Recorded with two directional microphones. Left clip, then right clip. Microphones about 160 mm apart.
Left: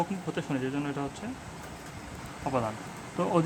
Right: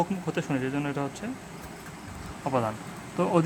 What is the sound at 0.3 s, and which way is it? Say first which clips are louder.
Speech: right 2 dB; 15° right (ahead or behind).